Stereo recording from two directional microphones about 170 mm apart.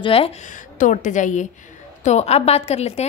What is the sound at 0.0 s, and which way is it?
A woman's voice, 35° left (ahead or behind).